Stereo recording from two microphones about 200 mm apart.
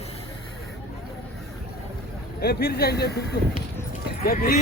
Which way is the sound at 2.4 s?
50° left (ahead or behind).